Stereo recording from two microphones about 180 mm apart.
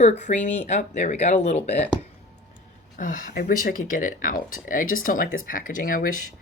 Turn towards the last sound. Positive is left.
turn(degrees=50)  # may be behind; listen again after turning